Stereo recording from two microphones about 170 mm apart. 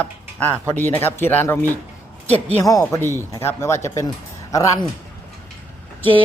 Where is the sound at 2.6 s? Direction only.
20° left (ahead or behind).